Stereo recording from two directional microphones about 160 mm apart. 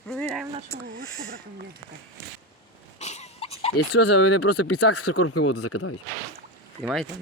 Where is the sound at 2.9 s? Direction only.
45° left (ahead or behind).